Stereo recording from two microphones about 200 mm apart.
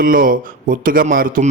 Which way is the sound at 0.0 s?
45° right (ahead or behind).